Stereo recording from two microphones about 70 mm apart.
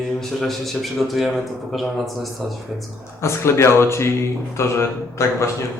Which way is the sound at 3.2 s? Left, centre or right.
Left.